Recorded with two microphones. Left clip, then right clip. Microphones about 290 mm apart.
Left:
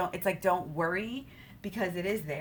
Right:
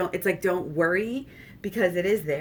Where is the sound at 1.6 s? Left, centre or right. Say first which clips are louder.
Right 9 dB; centre.